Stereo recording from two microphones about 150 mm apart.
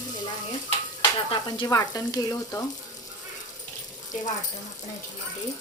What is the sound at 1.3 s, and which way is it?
Speech, 30° left (ahead or behind).